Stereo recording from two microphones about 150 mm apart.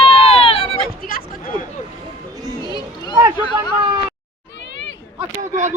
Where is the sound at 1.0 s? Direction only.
70° left (ahead or behind).